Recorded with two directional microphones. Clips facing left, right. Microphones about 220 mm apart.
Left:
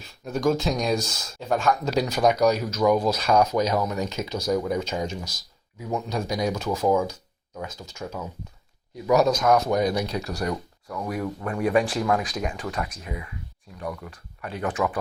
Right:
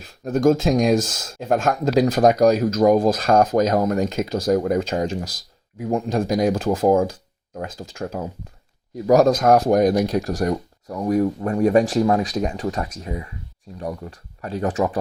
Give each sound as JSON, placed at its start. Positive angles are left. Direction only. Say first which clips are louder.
{"t": 0.0, "sound": "speech", "louder": "right 6 dB", "side_deg": -50}
{"t": 11.0, "sound": "speech", "louder": "right 10 dB", "side_deg": -35}